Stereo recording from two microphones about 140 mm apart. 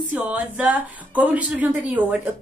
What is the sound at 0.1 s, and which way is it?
Speech, 10° right (ahead or behind).